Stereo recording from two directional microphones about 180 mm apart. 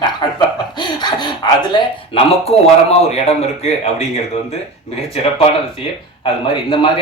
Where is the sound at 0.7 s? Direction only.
25° left (ahead or behind).